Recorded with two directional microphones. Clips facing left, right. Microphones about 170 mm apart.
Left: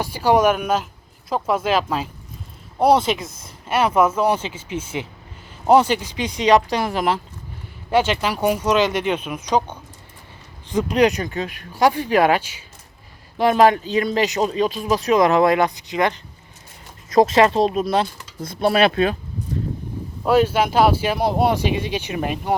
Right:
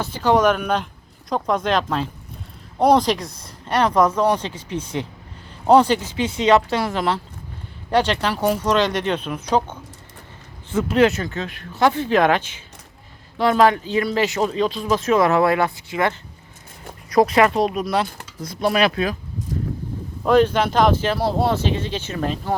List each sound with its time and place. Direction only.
0.0 s speech: 10° left (ahead or behind); by 19.1 s 25° left (ahead or behind)
20.2 s speech: 10° left (ahead or behind)